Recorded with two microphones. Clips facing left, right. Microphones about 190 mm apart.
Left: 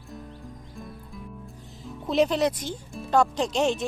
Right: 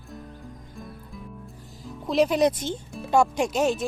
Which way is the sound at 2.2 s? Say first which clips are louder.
Right 3 dB; 15° right (ahead or behind).